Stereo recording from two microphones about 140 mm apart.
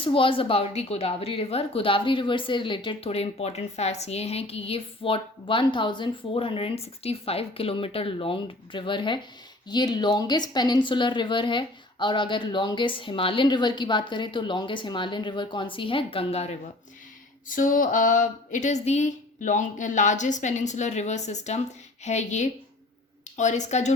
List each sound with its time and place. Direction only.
0.0 s a woman's voice: 40° left (ahead or behind)
17.5 s speech: 70° left (ahead or behind); by 23.9 s 55° left (ahead or behind)